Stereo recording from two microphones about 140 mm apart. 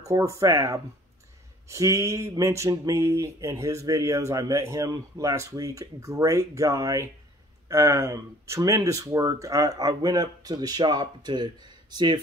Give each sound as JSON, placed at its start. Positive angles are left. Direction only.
{"t": 0.1, "sound": "speech", "side_deg": -20}